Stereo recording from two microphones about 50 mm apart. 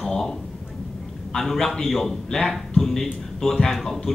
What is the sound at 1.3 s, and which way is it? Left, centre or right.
A man's voice, centre.